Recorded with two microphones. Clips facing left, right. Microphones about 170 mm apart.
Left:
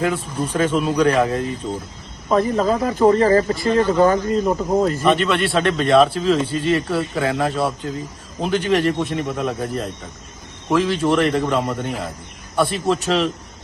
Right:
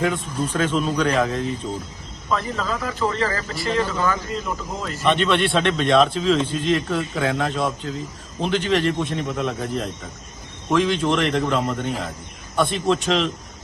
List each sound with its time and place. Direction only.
0.0 s speech: 10° left (ahead or behind)
2.3 s speech: 45° left (ahead or behind)
5.0 s a man's voice: 5° left (ahead or behind)